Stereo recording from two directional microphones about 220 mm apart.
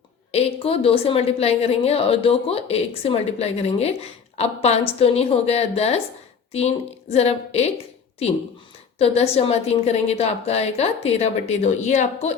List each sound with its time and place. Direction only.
0.3 s a woman's voice: 25° left (ahead or behind)
9.0 s a woman's voice: 30° left (ahead or behind)